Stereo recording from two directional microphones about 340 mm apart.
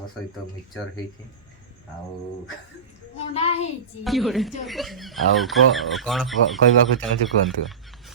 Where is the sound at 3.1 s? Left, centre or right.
Centre.